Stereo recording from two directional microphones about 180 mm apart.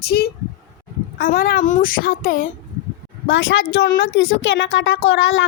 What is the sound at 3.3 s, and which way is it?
A woman's voice, 90° left.